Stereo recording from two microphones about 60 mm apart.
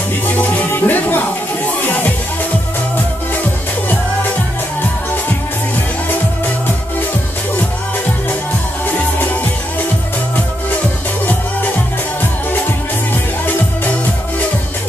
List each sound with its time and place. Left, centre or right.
0.4 s music: left